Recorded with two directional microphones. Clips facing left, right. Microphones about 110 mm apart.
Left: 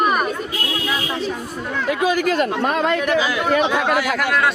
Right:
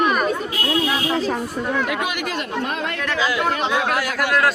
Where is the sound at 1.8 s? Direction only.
35° left (ahead or behind).